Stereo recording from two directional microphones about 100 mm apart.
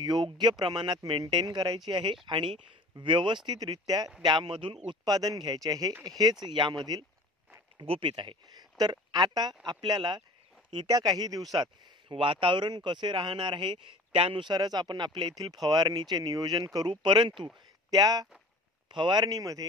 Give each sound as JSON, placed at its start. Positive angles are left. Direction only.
{"t": 0.0, "sound": "speech", "side_deg": -45}
{"t": 3.4, "sound": "speech", "side_deg": -40}
{"t": 4.2, "sound": "speech", "side_deg": -50}
{"t": 4.8, "sound": "speech", "side_deg": -40}
{"t": 7.8, "sound": "speech", "side_deg": -70}
{"t": 8.1, "sound": "speech", "side_deg": -50}
{"t": 11.5, "sound": "speech", "side_deg": -55}
{"t": 17.9, "sound": "speech", "side_deg": -40}
{"t": 18.9, "sound": "speech", "side_deg": -50}
{"t": 19.3, "sound": "speech", "side_deg": -35}